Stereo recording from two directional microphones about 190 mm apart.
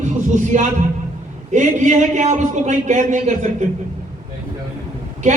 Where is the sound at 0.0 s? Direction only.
40° right (ahead or behind).